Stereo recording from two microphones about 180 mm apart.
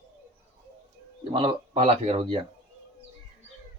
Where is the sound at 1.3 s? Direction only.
30° right (ahead or behind).